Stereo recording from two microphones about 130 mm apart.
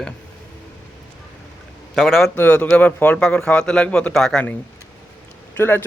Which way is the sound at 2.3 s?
15° left (ahead or behind).